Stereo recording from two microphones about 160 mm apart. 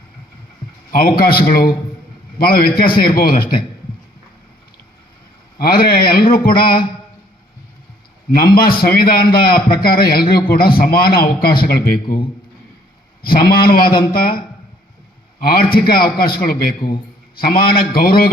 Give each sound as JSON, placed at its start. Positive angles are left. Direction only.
{"t": 0.9, "sound": "a man's voice", "side_deg": 70}
{"t": 5.5, "sound": "a man's voice", "side_deg": 70}
{"t": 8.4, "sound": "a man's voice", "side_deg": 70}
{"t": 13.2, "sound": "a man's voice", "side_deg": 70}
{"t": 16.8, "sound": "a man's voice", "side_deg": 80}
{"t": 17.3, "sound": "a man's voice", "side_deg": 70}